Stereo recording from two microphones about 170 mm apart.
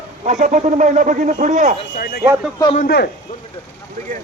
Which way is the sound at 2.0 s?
60° left (ahead or behind).